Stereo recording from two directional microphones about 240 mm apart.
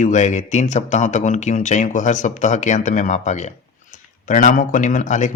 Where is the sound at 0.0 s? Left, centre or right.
Left.